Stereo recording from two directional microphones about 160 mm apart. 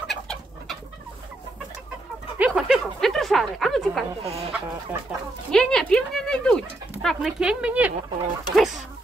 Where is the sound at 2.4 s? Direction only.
5° right (ahead or behind).